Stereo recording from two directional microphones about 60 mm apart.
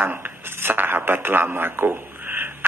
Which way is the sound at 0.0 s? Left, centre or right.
Right.